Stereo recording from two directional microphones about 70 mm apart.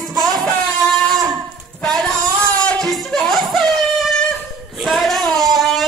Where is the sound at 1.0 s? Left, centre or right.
Right.